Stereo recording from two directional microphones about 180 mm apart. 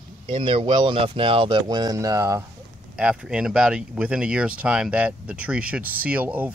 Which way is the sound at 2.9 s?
5° right (ahead or behind).